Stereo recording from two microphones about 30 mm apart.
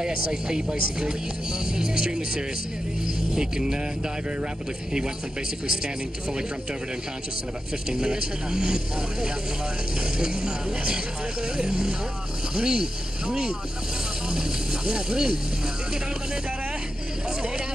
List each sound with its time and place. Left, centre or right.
0.0 s speech: right
7.9 s speech: right
14.3 s speech: right